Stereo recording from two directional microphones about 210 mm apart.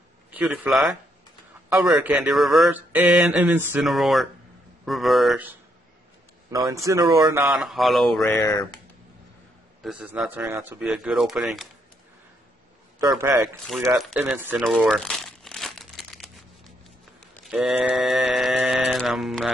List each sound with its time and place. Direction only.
0.3 s a man's voice: 5° right (ahead or behind)
1.9 s speech: 5° right (ahead or behind)
6.5 s speech: 15° right (ahead or behind)
7.4 s speech: centre (ahead or behind)
8.4 s speech: 20° left (ahead or behind)
9.8 s speech: 5° right (ahead or behind)
13.1 s speech: 10° right (ahead or behind)
14.6 s crumpling: centre (ahead or behind)
17.5 s mantra: centre (ahead or behind)